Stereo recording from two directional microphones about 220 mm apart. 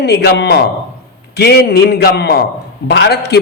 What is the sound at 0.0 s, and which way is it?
A man's voice, 50° left (ahead or behind).